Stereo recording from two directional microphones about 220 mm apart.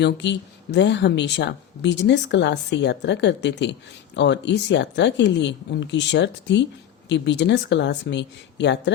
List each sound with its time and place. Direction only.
0.0 s a woman's voice: 50° left (ahead or behind)